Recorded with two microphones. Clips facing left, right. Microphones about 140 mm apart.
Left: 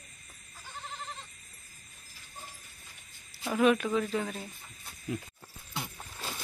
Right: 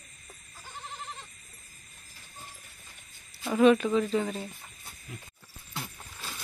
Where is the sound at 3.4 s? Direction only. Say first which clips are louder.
Right 4 dB; centre (ahead or behind).